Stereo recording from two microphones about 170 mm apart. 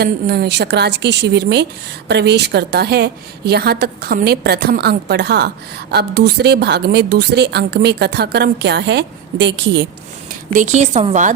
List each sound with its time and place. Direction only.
0.0 s a woman's voice: 70° right (ahead or behind); by 5.5 s 85° right
5.9 s a woman's voice: 70° right (ahead or behind); by 9.8 s 90° right
10.5 s a woman's voice: 45° right (ahead or behind)